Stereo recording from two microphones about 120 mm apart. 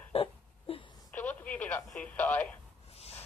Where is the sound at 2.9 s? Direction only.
60° left (ahead or behind).